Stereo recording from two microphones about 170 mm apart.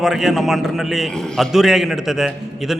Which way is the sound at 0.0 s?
Centre (ahead or behind).